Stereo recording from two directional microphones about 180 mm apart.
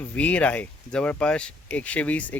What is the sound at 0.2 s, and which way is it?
Speech, 5° left (ahead or behind).